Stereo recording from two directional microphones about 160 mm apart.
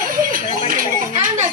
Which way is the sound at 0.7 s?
60° right (ahead or behind).